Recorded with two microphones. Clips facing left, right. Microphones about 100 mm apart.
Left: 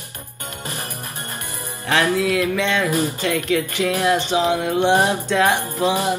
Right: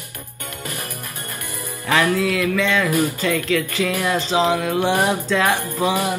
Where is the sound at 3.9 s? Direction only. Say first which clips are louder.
Left 2 dB; 20° left (ahead or behind).